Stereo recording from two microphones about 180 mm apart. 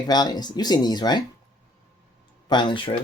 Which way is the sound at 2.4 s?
25° left (ahead or behind).